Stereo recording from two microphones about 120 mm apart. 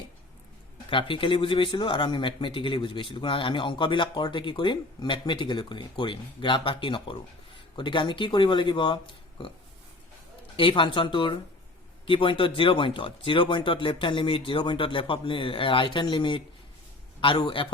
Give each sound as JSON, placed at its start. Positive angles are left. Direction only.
{"t": 0.9, "sound": "speech", "side_deg": 45}
{"t": 10.6, "sound": "speech", "side_deg": 45}